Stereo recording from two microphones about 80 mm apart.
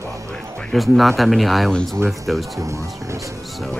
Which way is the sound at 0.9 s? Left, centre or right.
Centre.